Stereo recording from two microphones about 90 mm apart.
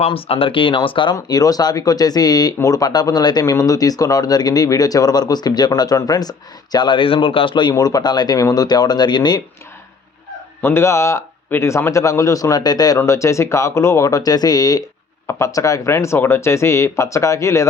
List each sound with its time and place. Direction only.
0.1 s speech: 90° left; by 1.1 s 65° left (ahead or behind)
1.1 s speech: 45° left (ahead or behind)
10.6 s speech: 30° left (ahead or behind); by 13.0 s 45° left (ahead or behind)
13.0 s speech: 35° left (ahead or behind)